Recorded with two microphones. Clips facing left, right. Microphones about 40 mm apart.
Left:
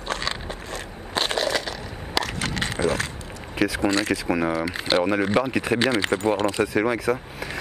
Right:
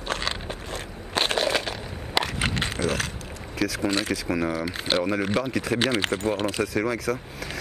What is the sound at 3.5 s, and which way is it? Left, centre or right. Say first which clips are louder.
Speech: left 3 dB; left.